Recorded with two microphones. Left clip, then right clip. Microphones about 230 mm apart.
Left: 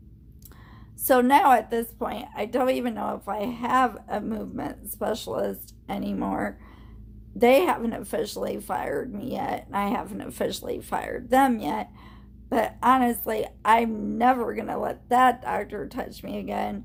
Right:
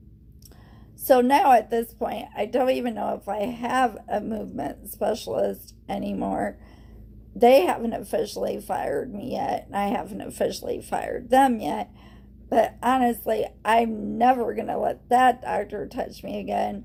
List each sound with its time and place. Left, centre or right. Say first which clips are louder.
1.0 s a woman's voice: right 1 dB; centre